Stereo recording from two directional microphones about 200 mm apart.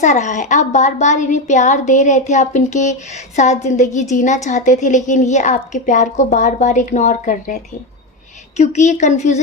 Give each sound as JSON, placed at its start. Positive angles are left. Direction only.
{"t": 0.0, "sound": "a woman's voice", "side_deg": 35}